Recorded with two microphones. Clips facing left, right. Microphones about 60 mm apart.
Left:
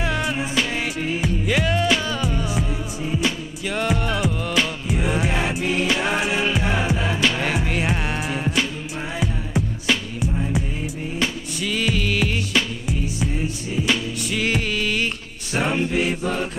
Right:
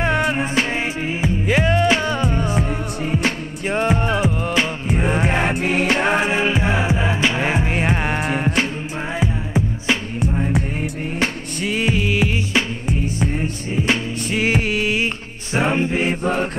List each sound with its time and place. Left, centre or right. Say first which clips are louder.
0.0 s music: right 5 dB; right
1.0 s music: right 1 dB; right
3.7 s music: right 4 dB; right
4.8 s music: right 3 dB; right
6.4 s music: right 3 dB; centre; by 8.6 s right
9.2 s music: right 3 dB; right
10.8 s music: right 3 dB; right
11.8 s music: right 3 dB; right
12.8 s music: right 3 dB; right